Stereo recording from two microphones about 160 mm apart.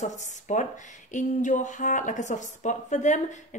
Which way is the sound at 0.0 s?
50° left (ahead or behind).